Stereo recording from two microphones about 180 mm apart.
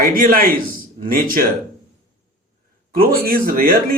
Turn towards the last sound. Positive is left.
turn(degrees=-50)  # may be behind; listen again after turning